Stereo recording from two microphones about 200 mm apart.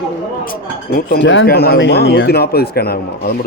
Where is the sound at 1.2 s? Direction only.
70° left (ahead or behind).